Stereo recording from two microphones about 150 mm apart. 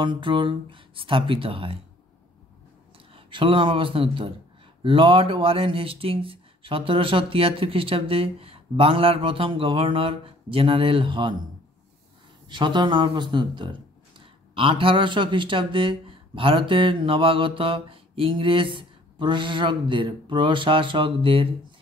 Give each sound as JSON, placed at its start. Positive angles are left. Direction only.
{"t": 0.0, "sound": "speech", "side_deg": -35}
{"t": 3.3, "sound": "speech", "side_deg": -35}
{"t": 12.4, "sound": "speech", "side_deg": -30}